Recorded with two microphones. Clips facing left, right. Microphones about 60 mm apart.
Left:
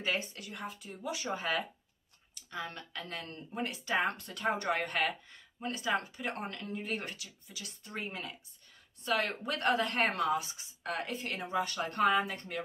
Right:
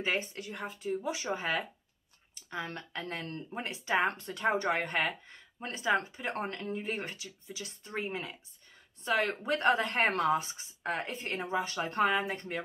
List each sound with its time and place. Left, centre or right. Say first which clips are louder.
0.0 s speech: right 2 dB; right